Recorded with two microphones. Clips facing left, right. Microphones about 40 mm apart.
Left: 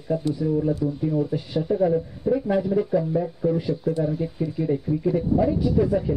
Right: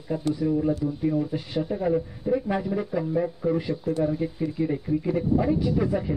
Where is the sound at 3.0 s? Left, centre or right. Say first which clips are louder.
Left 2 dB; right.